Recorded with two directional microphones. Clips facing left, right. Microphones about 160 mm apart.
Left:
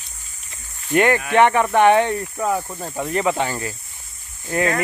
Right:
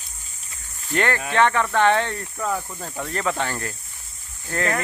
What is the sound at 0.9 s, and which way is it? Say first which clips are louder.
Speech: left 6 dB; 15° left (ahead or behind).